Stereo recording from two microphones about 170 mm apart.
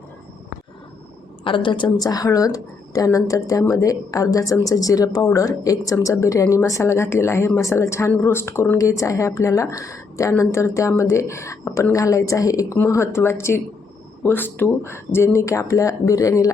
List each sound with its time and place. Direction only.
1.5 s speech: 30° left (ahead or behind)